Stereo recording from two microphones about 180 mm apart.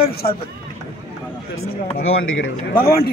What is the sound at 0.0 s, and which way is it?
Speech, 60° left (ahead or behind).